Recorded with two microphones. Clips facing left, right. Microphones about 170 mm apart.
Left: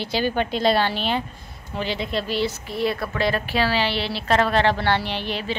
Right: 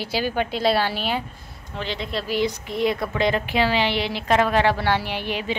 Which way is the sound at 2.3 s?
15° right (ahead or behind).